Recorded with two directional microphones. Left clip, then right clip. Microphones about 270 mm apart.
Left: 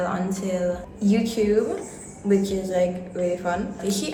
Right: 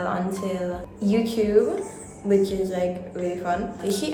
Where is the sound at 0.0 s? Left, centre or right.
Centre.